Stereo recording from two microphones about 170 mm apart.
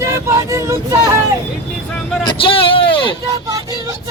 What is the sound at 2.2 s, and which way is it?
Vehicle, 30° left (ahead or behind).